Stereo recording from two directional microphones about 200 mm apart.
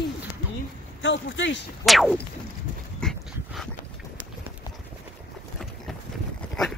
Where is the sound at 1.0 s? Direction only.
65° left (ahead or behind).